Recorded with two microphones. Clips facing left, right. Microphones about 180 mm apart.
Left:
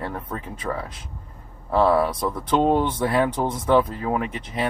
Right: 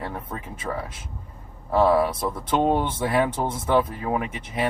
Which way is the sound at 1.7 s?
10° right (ahead or behind).